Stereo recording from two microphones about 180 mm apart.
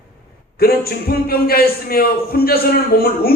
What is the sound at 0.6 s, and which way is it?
A man's voice, 60° left (ahead or behind).